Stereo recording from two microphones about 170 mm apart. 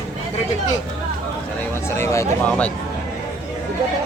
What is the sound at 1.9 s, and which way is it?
Speech, 15° left (ahead or behind).